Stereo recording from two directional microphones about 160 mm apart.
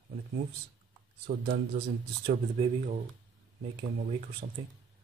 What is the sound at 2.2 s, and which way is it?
Speech, 40° right (ahead or behind).